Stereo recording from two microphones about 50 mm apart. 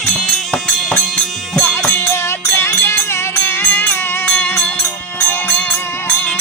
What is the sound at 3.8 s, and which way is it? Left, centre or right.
Music, left.